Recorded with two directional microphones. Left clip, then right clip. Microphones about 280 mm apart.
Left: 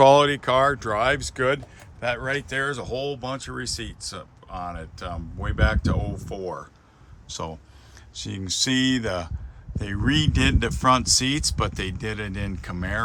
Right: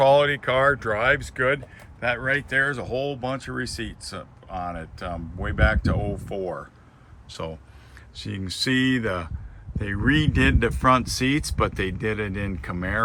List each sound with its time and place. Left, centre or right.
0.0 s speech: left; by 13.0 s centre